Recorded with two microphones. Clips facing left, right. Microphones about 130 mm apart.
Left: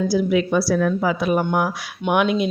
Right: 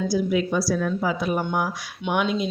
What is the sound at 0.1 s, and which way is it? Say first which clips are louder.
Speech: left 3 dB; 75° left (ahead or behind).